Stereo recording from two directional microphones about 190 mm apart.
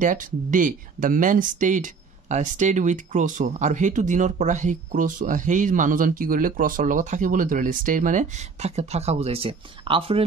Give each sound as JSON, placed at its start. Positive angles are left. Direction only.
{"t": 0.0, "sound": "speech", "side_deg": -45}